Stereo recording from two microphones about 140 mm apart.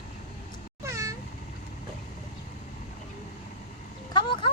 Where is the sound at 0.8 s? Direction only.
20° right (ahead or behind).